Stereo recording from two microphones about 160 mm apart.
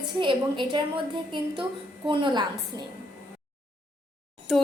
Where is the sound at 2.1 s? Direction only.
30° right (ahead or behind).